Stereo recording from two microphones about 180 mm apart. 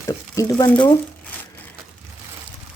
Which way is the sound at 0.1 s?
20° left (ahead or behind).